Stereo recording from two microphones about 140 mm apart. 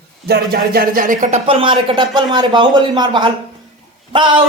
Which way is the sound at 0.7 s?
90° right.